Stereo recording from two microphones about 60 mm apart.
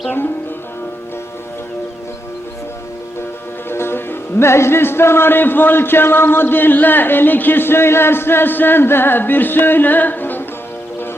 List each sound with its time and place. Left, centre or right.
3.7 s speech: left